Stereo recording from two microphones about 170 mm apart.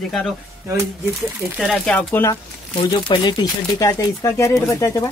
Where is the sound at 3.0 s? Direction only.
30° left (ahead or behind).